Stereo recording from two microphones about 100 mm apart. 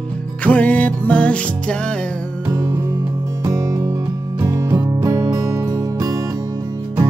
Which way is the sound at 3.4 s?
35° right (ahead or behind).